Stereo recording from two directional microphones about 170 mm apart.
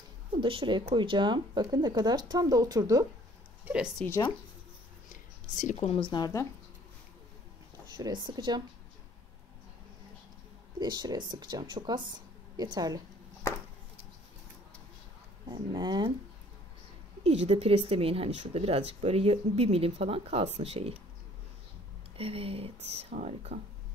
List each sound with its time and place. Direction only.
0.3 s speech: 30° right (ahead or behind)
3.6 s a woman's voice: 5° right (ahead or behind)
5.1 s speech: 45° left (ahead or behind); by 6.4 s 25° left (ahead or behind)
8.0 s speech: 25° right (ahead or behind)
10.8 s speech: 25° right (ahead or behind)
15.4 s speech: 25° right (ahead or behind)
17.2 s speech: 40° right (ahead or behind)
22.1 s speech: 35° right (ahead or behind)